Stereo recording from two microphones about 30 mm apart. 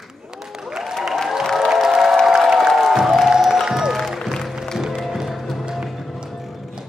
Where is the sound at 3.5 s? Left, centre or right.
Centre.